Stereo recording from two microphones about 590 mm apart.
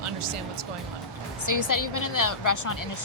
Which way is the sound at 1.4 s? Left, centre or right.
Left.